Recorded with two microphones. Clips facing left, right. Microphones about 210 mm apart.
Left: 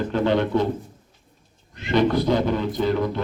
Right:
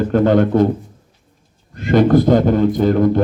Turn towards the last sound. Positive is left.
turn(degrees=-50)  # may be behind; listen again after turning